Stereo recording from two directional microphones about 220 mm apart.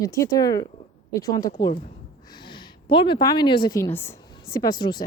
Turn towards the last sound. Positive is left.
turn(degrees=20)  # may be behind; listen again after turning